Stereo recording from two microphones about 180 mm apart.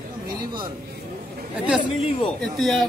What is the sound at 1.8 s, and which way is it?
Speech, 35° left (ahead or behind).